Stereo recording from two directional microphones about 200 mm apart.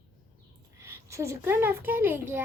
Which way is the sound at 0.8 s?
15° right (ahead or behind).